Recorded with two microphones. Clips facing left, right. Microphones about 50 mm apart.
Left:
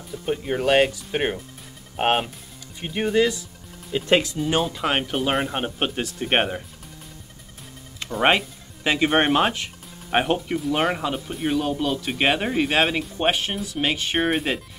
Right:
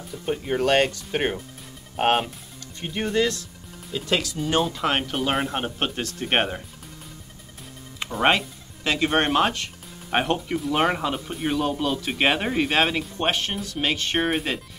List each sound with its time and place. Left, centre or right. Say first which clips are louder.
0.1 s speech: left 1 dB; centre
3.9 s speech: left 5 dB; left
4.4 s speech: even; centre
8.2 s speech: left 1 dB; centre